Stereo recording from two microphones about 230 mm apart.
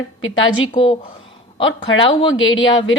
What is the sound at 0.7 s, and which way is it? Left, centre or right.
Speech, left.